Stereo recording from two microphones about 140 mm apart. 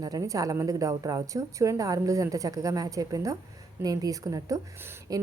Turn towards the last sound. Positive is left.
turn(degrees=-15)  # may be behind; listen again after turning